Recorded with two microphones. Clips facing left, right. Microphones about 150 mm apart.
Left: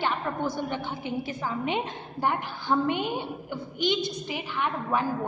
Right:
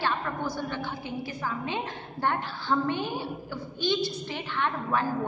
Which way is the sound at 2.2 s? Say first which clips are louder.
Left 1 dB; 10° left (ahead or behind).